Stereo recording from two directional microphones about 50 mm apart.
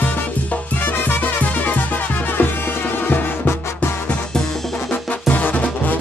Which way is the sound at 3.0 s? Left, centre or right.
Left.